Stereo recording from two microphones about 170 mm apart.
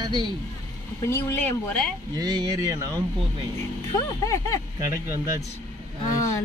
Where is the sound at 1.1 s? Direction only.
10° left (ahead or behind).